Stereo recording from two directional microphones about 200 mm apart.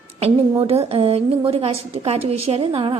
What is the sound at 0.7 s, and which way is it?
A woman's voice, 30° right (ahead or behind).